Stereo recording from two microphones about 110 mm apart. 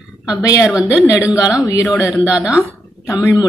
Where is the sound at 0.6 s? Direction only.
10° right (ahead or behind).